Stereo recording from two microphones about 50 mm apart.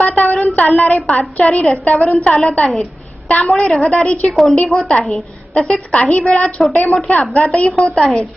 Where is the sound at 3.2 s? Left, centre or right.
Left.